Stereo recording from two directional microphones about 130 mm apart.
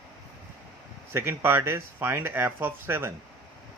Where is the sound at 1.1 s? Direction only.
20° right (ahead or behind).